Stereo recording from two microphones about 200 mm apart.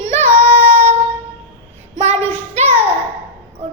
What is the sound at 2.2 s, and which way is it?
Child singing, 10° left (ahead or behind).